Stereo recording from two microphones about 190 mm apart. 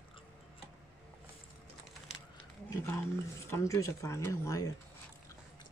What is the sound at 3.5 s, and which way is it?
Speech, 15° left (ahead or behind).